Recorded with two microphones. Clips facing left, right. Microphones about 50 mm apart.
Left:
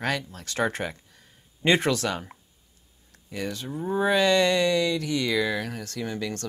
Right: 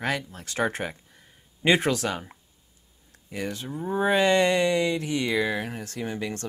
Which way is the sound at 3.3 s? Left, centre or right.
Right.